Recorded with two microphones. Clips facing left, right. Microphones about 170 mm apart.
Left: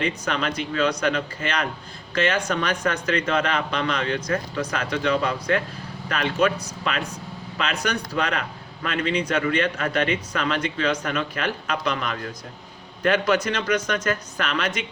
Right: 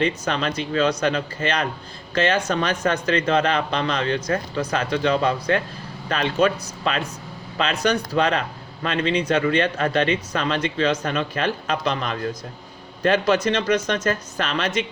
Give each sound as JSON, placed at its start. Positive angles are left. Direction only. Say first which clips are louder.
{"t": 0.0, "sound": "speech", "louder": "right 3 dB", "side_deg": -30}